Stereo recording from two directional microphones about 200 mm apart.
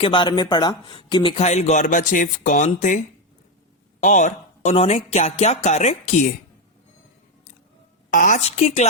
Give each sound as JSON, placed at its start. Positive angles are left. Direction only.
{"t": 0.0, "sound": "speech", "side_deg": 25}
{"t": 4.0, "sound": "speech", "side_deg": 40}
{"t": 8.1, "sound": "speech", "side_deg": 40}